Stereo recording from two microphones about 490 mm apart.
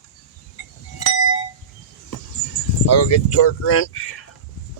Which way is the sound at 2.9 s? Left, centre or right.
Left.